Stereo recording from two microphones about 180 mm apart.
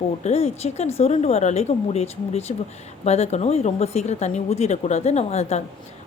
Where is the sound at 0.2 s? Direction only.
35° left (ahead or behind).